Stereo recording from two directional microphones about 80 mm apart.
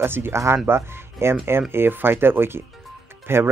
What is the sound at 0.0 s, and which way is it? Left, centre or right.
Speech, right.